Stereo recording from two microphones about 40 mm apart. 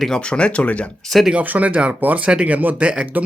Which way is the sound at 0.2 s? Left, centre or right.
Left.